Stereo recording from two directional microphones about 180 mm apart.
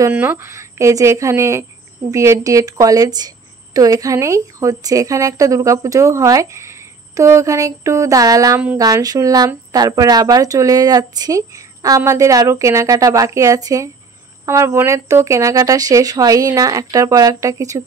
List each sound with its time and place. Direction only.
0.0 s a woman's voice: 10° right (ahead or behind)